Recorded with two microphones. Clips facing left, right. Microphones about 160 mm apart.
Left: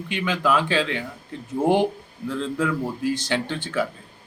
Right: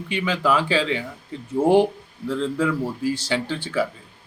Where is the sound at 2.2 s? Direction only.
Centre (ahead or behind).